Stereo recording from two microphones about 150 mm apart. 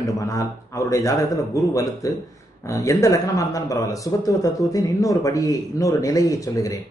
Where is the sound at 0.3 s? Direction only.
20° left (ahead or behind).